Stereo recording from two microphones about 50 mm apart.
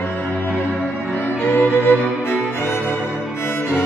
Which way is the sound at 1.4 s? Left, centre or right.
Left.